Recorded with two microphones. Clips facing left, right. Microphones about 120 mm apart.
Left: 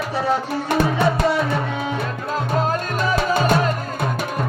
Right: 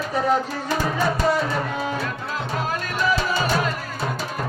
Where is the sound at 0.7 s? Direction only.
60° left (ahead or behind).